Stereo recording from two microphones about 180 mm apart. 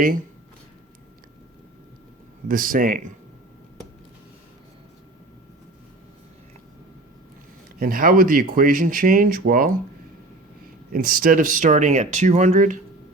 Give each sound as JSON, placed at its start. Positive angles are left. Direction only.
{"t": 0.0, "sound": "speech", "side_deg": -50}
{"t": 2.5, "sound": "speech", "side_deg": -50}
{"t": 7.8, "sound": "speech", "side_deg": -50}
{"t": 10.9, "sound": "speech", "side_deg": -50}